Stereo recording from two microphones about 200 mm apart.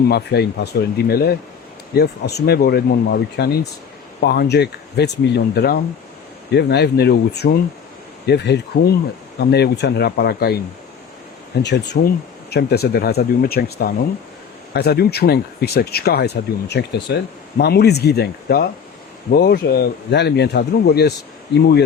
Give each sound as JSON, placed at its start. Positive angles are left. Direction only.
{"t": 0.1, "sound": "speech", "side_deg": 55}
{"t": 11.6, "sound": "speech", "side_deg": 60}